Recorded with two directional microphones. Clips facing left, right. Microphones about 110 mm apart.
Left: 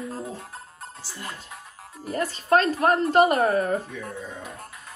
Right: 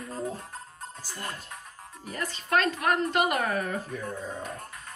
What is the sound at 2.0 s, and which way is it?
Speech, 40° left (ahead or behind).